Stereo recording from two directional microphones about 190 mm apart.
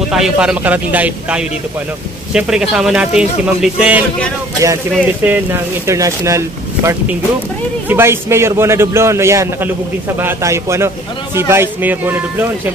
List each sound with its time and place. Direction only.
0.1 s a man's voice: 5° right (ahead or behind)